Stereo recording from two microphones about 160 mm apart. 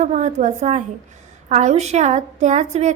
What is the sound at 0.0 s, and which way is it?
A woman's voice, 45° right (ahead or behind).